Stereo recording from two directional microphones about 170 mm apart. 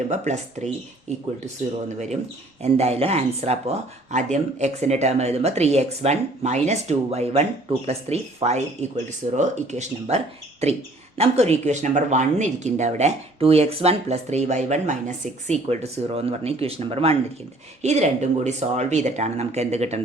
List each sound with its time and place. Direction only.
0.1 s speech: 45° right (ahead or behind)
2.6 s speech: 40° right (ahead or behind)
11.2 s speech: 40° right (ahead or behind)